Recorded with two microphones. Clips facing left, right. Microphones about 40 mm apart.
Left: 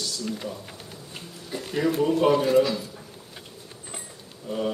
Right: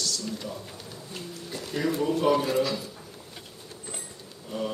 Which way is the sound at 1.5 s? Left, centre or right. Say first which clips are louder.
Left 3 dB; centre.